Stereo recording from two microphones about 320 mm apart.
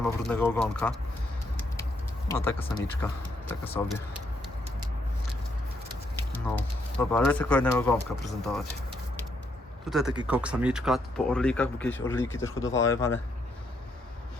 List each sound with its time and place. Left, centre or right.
0.0 s speech: centre
1.7 s vehicle: centre
3.0 s speech: centre
6.3 s speech: centre
9.9 s speech: centre